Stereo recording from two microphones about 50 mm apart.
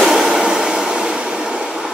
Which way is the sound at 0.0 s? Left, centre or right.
Centre.